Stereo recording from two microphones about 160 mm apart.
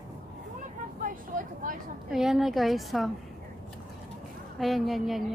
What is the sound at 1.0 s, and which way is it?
Vehicle, 60° right (ahead or behind).